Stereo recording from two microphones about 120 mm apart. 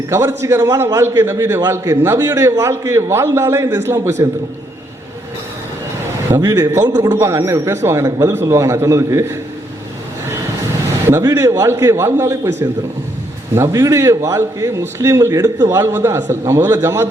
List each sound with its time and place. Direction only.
0.1 s a man's voice: 25° right (ahead or behind)
6.3 s a man's voice: 25° right (ahead or behind)
11.2 s a man's voice: 30° right (ahead or behind)